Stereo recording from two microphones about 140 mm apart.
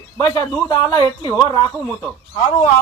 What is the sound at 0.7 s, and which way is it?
Speech, 30° left (ahead or behind).